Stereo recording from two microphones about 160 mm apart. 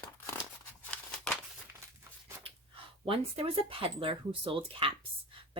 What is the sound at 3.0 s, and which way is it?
A woman's voice, 35° right (ahead or behind).